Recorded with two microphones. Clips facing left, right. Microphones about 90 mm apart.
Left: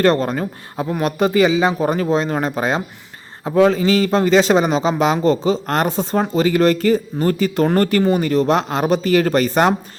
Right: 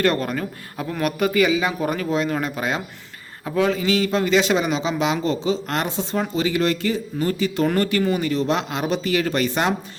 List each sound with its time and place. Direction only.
0.0 s a man's voice: 30° left (ahead or behind)